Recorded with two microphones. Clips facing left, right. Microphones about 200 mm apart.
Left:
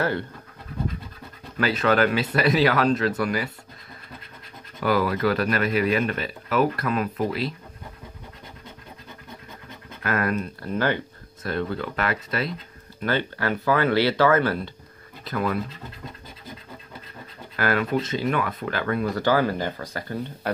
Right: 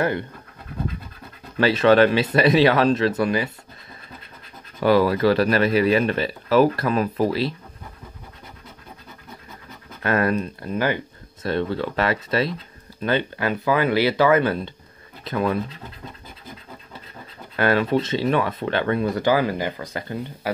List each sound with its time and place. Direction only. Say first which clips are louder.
1.6 s speech: right 6 dB; 25° right (ahead or behind)
4.7 s speech: right 5 dB; 30° right (ahead or behind)
10.0 s speech: right 4 dB; 30° right (ahead or behind)
11.4 s speech: right 4 dB; 25° right (ahead or behind)
17.6 s speech: right 4 dB; 25° right (ahead or behind)
20.4 s speech: right 1 dB; 10° right (ahead or behind)